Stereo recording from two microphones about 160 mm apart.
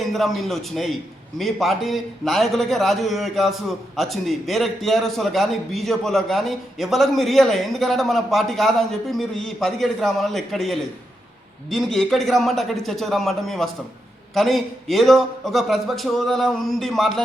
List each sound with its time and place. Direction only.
0.1 s a man's voice: centre (ahead or behind)